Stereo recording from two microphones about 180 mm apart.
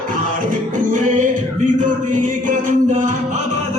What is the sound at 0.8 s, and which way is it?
Music, 45° right (ahead or behind).